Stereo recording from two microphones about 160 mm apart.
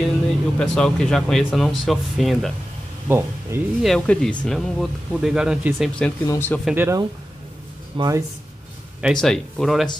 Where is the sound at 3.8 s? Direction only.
Centre (ahead or behind).